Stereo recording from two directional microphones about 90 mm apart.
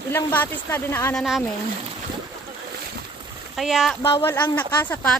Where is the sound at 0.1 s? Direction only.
25° left (ahead or behind).